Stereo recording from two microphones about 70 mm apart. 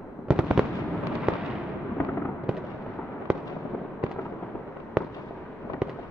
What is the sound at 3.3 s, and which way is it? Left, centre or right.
Fireworks, centre.